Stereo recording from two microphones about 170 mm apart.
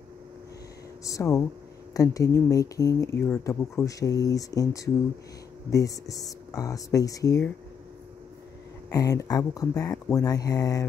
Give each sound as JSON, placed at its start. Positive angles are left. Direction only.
{"t": 1.0, "sound": "speech", "side_deg": 20}
{"t": 8.9, "sound": "speech", "side_deg": 20}